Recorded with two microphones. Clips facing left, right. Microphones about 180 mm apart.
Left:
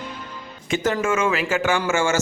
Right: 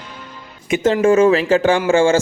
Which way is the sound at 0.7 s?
30° right (ahead or behind).